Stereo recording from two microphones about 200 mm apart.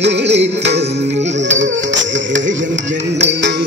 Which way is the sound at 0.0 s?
60° right (ahead or behind).